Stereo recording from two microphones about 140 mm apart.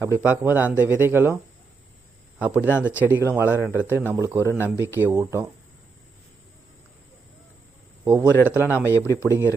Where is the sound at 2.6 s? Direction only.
15° left (ahead or behind).